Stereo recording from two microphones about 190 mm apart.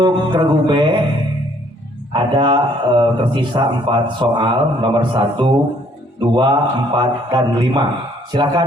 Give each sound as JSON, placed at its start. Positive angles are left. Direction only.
{"t": 0.0, "sound": "a man's voice", "side_deg": -25}
{"t": 2.1, "sound": "a man's voice", "side_deg": -25}